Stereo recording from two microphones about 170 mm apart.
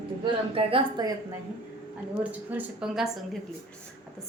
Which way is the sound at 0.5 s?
30° right (ahead or behind).